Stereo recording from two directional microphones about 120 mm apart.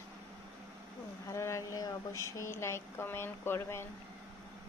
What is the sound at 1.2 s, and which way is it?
Speech, 25° left (ahead or behind).